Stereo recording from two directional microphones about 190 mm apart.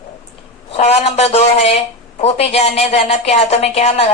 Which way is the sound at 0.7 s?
35° left (ahead or behind).